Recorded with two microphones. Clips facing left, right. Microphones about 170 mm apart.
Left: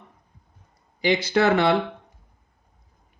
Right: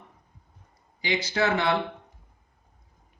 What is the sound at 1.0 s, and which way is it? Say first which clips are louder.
Speech: left 6 dB; 60° left (ahead or behind).